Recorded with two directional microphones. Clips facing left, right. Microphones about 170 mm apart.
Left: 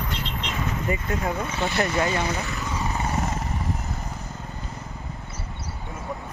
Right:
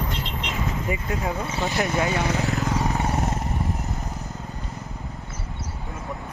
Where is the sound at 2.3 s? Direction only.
70° right (ahead or behind).